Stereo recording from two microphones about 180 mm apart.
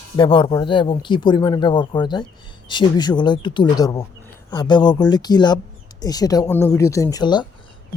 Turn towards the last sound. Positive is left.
turn(degrees=25)  # may be behind; listen again after turning